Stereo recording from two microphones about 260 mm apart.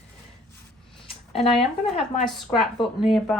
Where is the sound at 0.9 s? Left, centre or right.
Left.